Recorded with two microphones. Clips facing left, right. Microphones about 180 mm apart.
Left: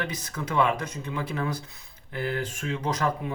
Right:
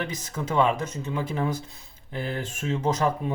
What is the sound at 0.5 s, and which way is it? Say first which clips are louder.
Speech: right 2 dB; 25° right (ahead or behind).